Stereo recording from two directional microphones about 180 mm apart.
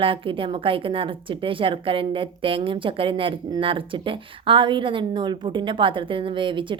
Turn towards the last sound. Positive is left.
turn(degrees=-25)  # may be behind; listen again after turning